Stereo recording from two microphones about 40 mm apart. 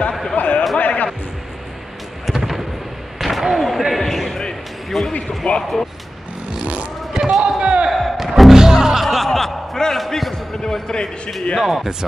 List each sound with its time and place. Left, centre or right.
0.1 s a sound: centre
0.4 s a sound: left
2.3 s thunder: centre
3.2 s slam: centre
3.9 s a sound: centre
5.4 s speech: left
6.6 s vehicle: right
7.2 s basketball bounce: centre
7.4 s a sound: right
7.9 s music: centre
9.0 s music: centre
9.9 s basketball bounce: centre
10.3 s music: centre
11.6 s speech: centre